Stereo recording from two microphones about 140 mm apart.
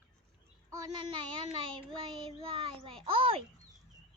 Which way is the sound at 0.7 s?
30° right (ahead or behind).